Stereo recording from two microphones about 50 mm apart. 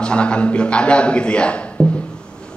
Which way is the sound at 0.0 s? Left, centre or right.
Left.